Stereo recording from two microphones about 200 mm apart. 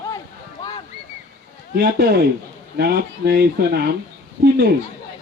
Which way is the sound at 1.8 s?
50° right (ahead or behind).